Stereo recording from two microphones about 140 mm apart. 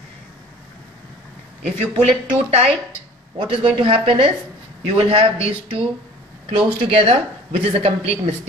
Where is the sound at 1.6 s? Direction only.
50° right (ahead or behind).